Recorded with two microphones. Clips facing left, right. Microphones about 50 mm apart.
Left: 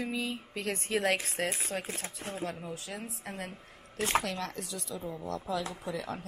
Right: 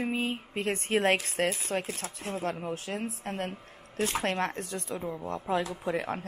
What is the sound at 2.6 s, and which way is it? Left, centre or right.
Speech, right.